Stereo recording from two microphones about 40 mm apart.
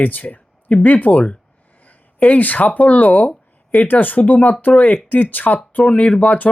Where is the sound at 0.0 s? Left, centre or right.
Left.